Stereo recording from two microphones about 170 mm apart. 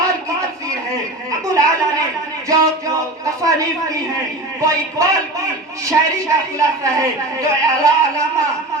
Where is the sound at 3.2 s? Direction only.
20° right (ahead or behind).